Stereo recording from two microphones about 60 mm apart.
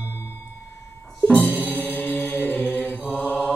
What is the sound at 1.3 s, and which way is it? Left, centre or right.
Mantra, left.